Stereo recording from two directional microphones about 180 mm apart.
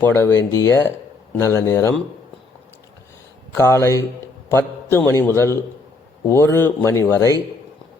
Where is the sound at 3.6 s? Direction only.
15° left (ahead or behind).